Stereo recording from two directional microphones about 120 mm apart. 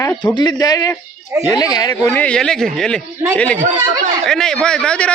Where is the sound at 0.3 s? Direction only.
35° left (ahead or behind).